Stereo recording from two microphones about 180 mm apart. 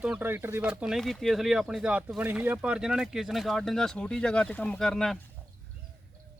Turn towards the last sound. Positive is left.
turn(degrees=0)  # may be behind; listen again after turning